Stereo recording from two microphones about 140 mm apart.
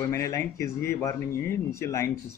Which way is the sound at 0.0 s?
20° left (ahead or behind).